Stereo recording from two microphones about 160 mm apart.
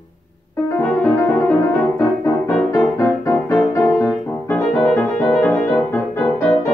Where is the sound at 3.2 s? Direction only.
20° left (ahead or behind).